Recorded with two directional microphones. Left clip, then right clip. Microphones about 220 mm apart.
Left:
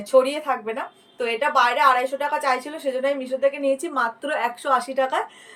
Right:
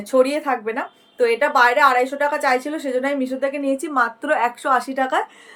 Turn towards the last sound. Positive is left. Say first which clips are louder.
# right 2 dB
turn(degrees=-20)  # may be behind; listen again after turning